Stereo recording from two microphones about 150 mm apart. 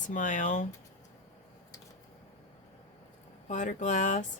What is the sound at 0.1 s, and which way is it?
Speech, 55° left (ahead or behind).